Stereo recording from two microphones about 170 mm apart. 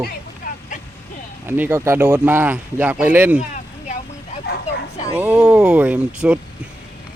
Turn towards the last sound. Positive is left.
turn(degrees=-5)  # may be behind; listen again after turning